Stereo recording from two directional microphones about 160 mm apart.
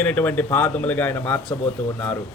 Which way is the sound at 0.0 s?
10° left (ahead or behind).